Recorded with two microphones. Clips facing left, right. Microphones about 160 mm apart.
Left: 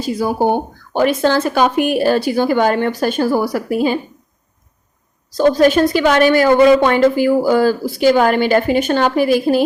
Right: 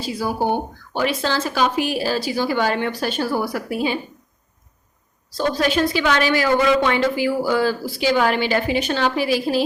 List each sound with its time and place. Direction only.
0.0 s speech: 50° left (ahead or behind)
5.4 s speech: 45° left (ahead or behind)